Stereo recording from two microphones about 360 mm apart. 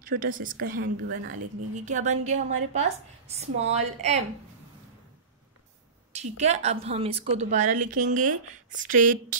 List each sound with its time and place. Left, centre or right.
0.0 s a woman's voice: right
6.1 s a woman's voice: centre